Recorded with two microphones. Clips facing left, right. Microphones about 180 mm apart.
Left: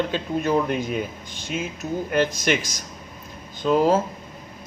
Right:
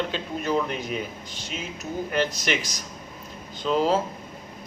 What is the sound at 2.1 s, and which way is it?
Speech, 50° left (ahead or behind).